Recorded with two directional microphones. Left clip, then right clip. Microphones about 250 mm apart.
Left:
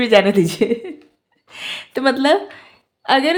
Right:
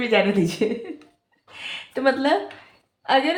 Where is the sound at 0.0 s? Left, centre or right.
Left.